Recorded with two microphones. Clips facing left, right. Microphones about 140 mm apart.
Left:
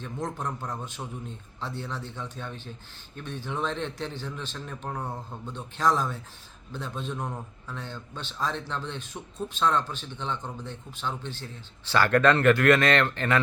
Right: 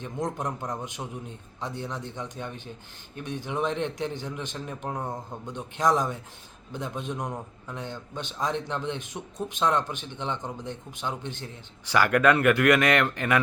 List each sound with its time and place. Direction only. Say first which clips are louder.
0.0 s a man's voice: right 2 dB; 20° right (ahead or behind)